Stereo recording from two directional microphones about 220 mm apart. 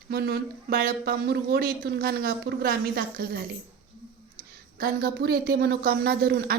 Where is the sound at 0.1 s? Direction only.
45° right (ahead or behind).